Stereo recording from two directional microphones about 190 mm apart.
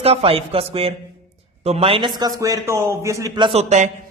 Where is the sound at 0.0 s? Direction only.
30° right (ahead or behind).